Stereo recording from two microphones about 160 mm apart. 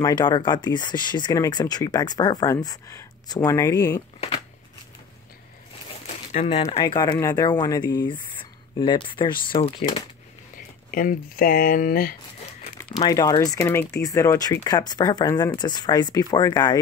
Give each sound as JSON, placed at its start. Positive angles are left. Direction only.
{"t": 0.0, "sound": "speech", "side_deg": 25}
{"t": 6.4, "sound": "speech", "side_deg": 40}
{"t": 6.8, "sound": "speech", "side_deg": 25}
{"t": 10.9, "sound": "speech", "side_deg": 60}
{"t": 13.0, "sound": "speech", "side_deg": 20}